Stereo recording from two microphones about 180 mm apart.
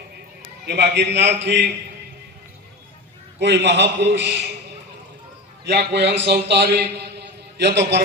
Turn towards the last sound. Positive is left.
turn(degrees=-75)  # may be behind; listen again after turning